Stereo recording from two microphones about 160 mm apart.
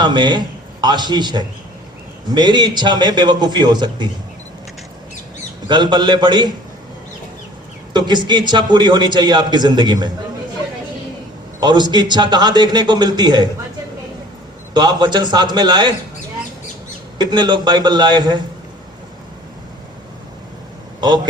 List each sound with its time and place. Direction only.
0.0 s a man's voice: 30° right (ahead or behind)
5.6 s a man's voice: 30° right (ahead or behind)
7.9 s a man's voice: 25° right (ahead or behind)
11.6 s a man's voice: 25° right (ahead or behind)
14.7 s a man's voice: 25° right (ahead or behind)
17.2 s a man's voice: 25° right (ahead or behind)